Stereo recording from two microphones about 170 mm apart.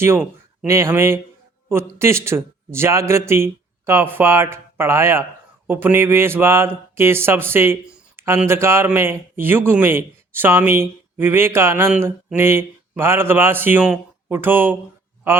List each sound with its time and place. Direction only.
0.0 s a man's voice: 10° right (ahead or behind)